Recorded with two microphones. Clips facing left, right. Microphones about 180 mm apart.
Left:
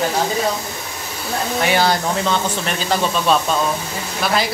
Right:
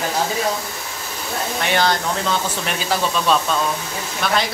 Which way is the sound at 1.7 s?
10° left (ahead or behind).